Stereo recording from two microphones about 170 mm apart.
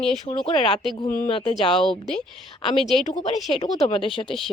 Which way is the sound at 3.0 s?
45° left (ahead or behind).